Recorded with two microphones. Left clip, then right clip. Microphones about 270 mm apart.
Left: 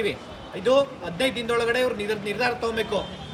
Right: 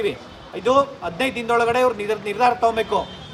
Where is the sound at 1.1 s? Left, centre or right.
Right.